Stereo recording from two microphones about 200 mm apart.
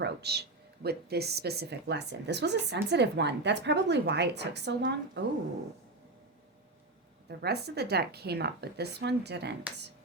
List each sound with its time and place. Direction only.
0.0 s speech: 55° right (ahead or behind)
7.3 s speech: 55° right (ahead or behind)